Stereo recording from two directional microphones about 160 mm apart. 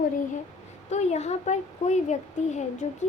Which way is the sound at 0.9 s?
45° left (ahead or behind).